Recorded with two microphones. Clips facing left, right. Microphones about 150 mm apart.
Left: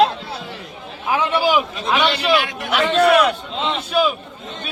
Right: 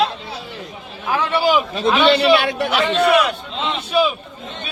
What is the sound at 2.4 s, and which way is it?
Speech, 35° right (ahead or behind).